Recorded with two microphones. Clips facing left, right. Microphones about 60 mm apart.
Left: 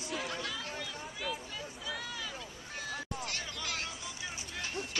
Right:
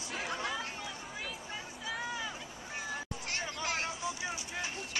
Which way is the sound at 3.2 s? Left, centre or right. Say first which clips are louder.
Right 3 dB; right.